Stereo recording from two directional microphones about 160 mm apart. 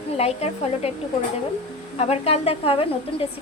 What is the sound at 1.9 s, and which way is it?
A woman's voice, 40° left (ahead or behind).